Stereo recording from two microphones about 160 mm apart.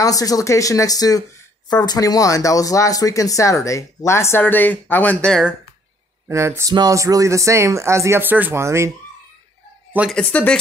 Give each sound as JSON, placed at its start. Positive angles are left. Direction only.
{"t": 0.0, "sound": "speech", "side_deg": 20}
{"t": 6.2, "sound": "speech", "side_deg": -15}
{"t": 10.1, "sound": "speech", "side_deg": 5}